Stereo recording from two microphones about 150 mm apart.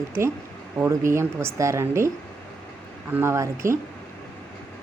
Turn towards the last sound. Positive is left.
turn(degrees=-20)  # may be behind; listen again after turning